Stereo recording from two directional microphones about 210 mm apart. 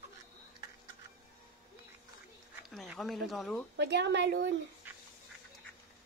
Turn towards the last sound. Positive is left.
turn(degrees=-55)  # may be behind; listen again after turning